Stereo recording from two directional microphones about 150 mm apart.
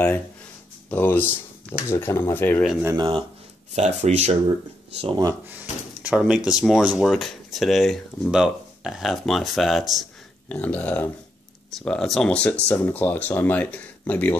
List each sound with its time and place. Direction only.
0.8 s speech: 10° left (ahead or behind)
2.8 s speech: 20° right (ahead or behind)
3.7 s speech: 50° right (ahead or behind)
5.0 s speech: 25° right (ahead or behind)
5.6 s speech: 5° right (ahead or behind)
10.5 s speech: 10° left (ahead or behind)